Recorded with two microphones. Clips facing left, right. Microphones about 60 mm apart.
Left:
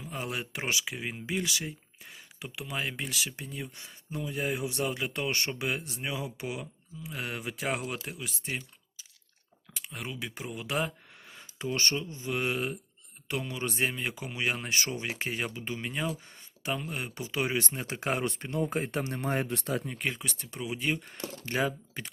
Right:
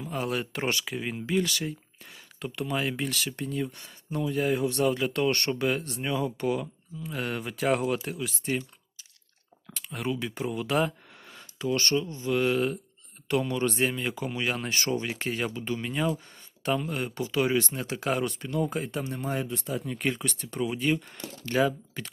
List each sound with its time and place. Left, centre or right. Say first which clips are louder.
0.1 s speech: right 5 dB; centre
9.9 s speech: right 8 dB; centre
11.6 s speech: right 5 dB; left; by 17.1 s centre
17.2 s speech: right 5 dB; left
20.0 s speech: right 5 dB; centre
21.2 s speech: right 5 dB; left